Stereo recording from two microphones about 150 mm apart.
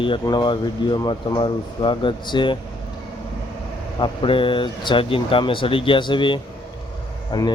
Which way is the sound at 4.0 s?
35° left (ahead or behind).